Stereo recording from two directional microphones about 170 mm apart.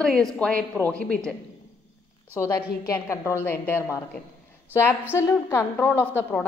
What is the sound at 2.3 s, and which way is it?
A woman's voice, 15° left (ahead or behind).